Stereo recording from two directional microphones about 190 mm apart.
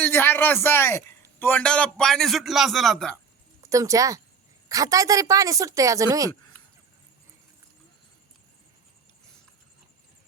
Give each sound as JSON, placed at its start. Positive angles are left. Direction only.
{"t": 0.0, "sound": "a man's voice", "side_deg": 10}
{"t": 3.6, "sound": "a woman's voice", "side_deg": -15}